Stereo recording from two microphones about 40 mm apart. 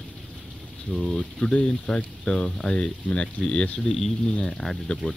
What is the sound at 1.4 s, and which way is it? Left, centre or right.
Speech, left.